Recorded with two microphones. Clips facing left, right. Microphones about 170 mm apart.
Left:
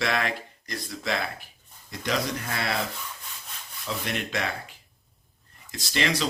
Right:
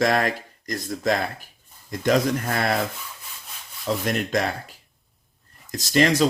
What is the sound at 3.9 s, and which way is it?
Speech, 40° right (ahead or behind).